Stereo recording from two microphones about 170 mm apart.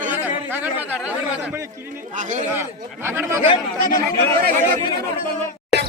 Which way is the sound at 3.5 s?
20° left (ahead or behind).